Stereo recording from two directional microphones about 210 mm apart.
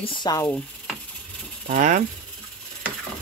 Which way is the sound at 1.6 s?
35° right (ahead or behind).